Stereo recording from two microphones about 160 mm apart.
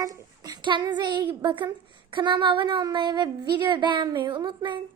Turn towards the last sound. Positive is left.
turn(degrees=-30)  # may be behind; listen again after turning